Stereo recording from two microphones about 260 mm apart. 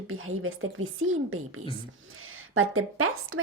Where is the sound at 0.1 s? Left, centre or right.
Right.